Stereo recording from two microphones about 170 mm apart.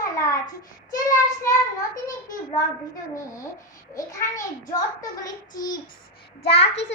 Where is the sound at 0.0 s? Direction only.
20° left (ahead or behind).